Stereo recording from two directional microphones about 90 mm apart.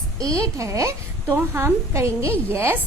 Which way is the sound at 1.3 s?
25° right (ahead or behind).